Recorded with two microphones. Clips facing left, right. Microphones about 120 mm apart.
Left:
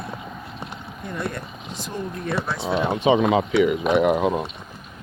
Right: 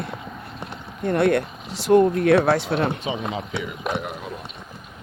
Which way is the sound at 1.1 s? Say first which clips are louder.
Right 11 dB; 70° right (ahead or behind).